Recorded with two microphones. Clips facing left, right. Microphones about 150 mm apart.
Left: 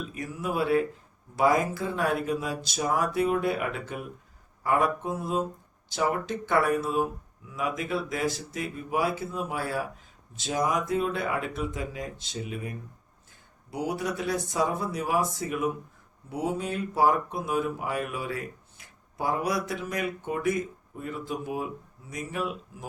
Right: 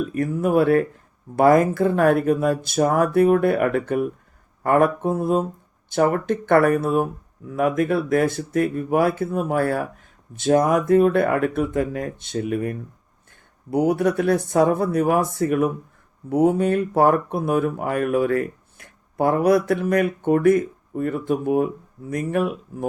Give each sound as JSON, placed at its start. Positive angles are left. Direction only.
{"t": 0.0, "sound": "speech", "side_deg": -50}